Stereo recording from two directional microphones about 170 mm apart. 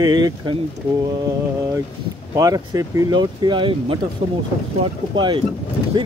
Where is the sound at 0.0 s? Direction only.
25° right (ahead or behind).